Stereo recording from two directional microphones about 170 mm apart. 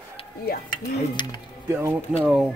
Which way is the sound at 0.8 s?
25° left (ahead or behind).